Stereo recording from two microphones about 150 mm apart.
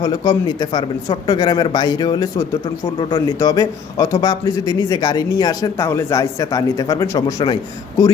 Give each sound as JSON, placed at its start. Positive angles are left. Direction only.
{"t": 0.0, "sound": "a man's voice", "side_deg": 25}